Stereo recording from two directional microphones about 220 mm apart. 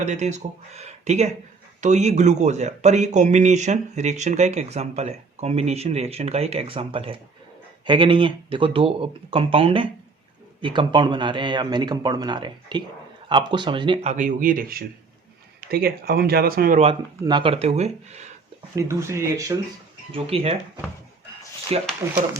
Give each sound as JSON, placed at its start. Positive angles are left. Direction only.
{"t": 0.0, "sound": "speech", "side_deg": -30}
{"t": 16.8, "sound": "speech", "side_deg": -20}
{"t": 18.8, "sound": "speech", "side_deg": -15}
{"t": 20.1, "sound": "speech", "side_deg": -25}
{"t": 21.7, "sound": "speech", "side_deg": -30}